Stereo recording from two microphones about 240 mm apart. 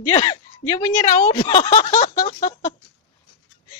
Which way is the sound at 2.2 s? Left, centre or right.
Centre.